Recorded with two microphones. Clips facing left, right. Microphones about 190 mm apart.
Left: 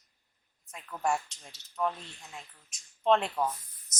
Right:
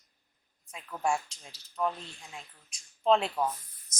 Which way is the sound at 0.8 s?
5° right (ahead or behind).